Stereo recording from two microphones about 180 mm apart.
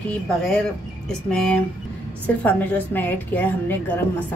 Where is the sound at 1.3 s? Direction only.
5° left (ahead or behind).